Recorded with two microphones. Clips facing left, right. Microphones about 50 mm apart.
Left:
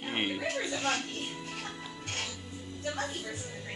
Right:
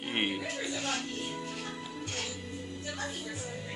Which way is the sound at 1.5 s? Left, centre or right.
Left.